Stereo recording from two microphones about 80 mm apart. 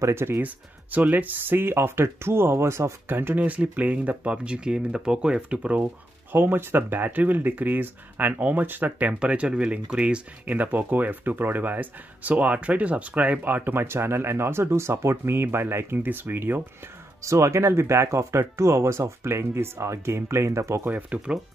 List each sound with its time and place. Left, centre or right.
0.0 s speech: right
0.9 s speech: right
6.3 s speech: right
17.2 s speech: right
20.9 s speech: centre